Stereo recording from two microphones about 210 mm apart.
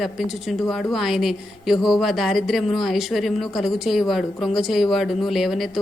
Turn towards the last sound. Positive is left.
turn(degrees=0)  # may be behind; listen again after turning